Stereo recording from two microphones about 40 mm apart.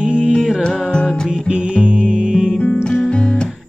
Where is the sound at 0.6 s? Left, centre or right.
Left.